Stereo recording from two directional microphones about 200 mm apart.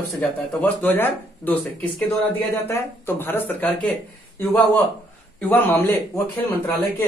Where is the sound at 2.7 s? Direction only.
10° left (ahead or behind).